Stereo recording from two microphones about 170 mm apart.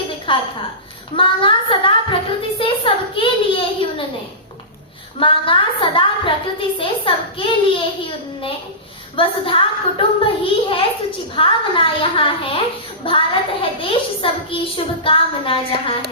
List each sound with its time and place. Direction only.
0.3 s a woman's voice: 30° left (ahead or behind)
2.6 s a sound: 30° left (ahead or behind)
5.2 s a woman's voice: 30° left (ahead or behind)
9.1 s a woman's voice: 30° left (ahead or behind)